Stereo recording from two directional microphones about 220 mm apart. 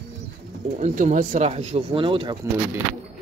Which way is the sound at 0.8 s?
35° right (ahead or behind).